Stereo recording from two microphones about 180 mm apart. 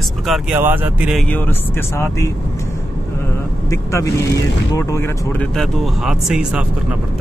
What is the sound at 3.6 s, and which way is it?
Speech, 15° left (ahead or behind).